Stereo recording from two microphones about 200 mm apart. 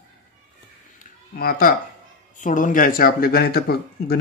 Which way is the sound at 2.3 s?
40° left (ahead or behind).